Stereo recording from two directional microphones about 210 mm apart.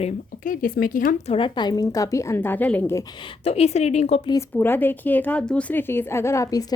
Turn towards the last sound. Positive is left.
turn(degrees=15)  # may be behind; listen again after turning